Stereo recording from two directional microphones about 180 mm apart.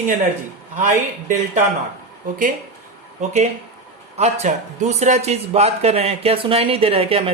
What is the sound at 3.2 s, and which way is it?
Speech, 40° right (ahead or behind).